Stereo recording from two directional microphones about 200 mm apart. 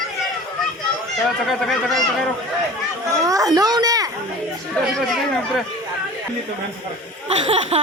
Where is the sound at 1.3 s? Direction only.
Centre (ahead or behind).